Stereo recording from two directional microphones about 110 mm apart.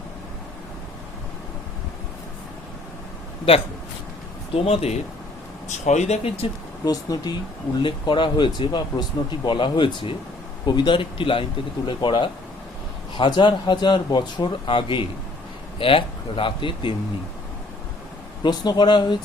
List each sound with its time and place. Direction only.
4.5 s speech: 65° left (ahead or behind)
5.6 s speech: 90° left; by 6.5 s 65° left (ahead or behind)
6.8 s speech: 35° left (ahead or behind)
7.8 s speech: 50° left (ahead or behind)
18.4 s speech: 45° left (ahead or behind)